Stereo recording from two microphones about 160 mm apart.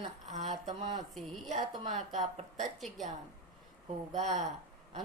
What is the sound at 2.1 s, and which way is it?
Speech, 50° right (ahead or behind).